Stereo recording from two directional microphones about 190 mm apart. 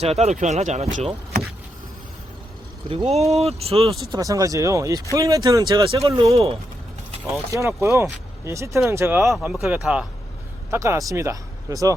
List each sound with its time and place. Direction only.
0.0 s speech: 35° right (ahead or behind)
2.9 s speech: 35° right (ahead or behind)
4.1 s speech: 15° right (ahead or behind)
6.3 s speech: 30° right (ahead or behind)
7.5 s speech: 15° right (ahead or behind)
10.7 s speech: 15° right (ahead or behind)